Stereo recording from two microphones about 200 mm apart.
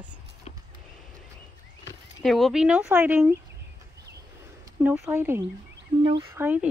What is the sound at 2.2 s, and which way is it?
Speech, centre (ahead or behind).